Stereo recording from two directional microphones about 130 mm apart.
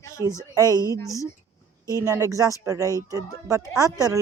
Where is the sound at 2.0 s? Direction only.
25° right (ahead or behind).